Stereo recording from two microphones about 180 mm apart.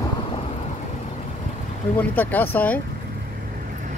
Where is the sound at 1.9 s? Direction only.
10° left (ahead or behind).